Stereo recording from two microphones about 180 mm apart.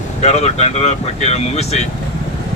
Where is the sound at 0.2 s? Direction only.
40° left (ahead or behind).